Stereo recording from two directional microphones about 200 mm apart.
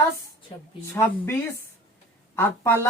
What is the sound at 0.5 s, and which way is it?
Speech, 25° left (ahead or behind).